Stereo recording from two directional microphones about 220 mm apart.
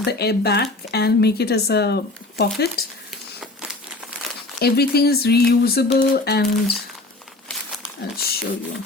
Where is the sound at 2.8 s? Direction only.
45° left (ahead or behind).